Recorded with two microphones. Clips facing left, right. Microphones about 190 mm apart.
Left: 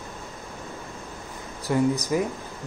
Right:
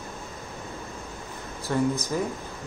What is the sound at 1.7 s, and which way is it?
Speech, 10° left (ahead or behind).